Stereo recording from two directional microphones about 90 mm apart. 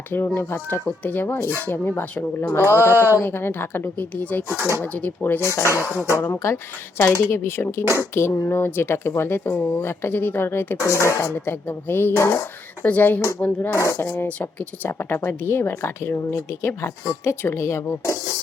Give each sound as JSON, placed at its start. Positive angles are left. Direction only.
{"t": 0.1, "sound": "speech", "side_deg": 25}
{"t": 2.9, "sound": "speech", "side_deg": -25}
{"t": 3.2, "sound": "speech", "side_deg": 25}
{"t": 13.7, "sound": "speech", "side_deg": 30}
{"t": 14.8, "sound": "speech", "side_deg": 25}